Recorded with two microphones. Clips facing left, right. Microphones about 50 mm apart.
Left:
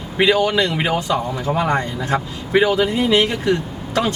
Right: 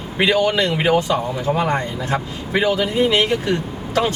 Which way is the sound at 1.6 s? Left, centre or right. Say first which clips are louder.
Left 1 dB; left.